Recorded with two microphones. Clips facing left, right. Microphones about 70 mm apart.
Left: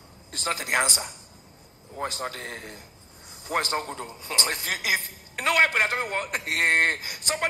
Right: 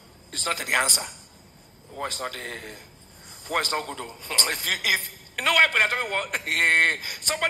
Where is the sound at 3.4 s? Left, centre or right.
Left.